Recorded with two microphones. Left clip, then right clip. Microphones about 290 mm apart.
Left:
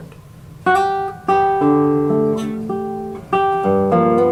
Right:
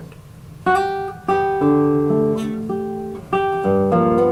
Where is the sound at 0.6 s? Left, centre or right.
Centre.